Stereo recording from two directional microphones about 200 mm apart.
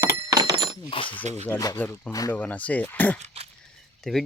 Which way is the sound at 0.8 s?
25° left (ahead or behind).